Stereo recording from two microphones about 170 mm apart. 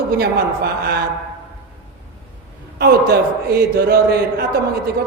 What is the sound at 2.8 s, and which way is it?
Speech, 70° right (ahead or behind).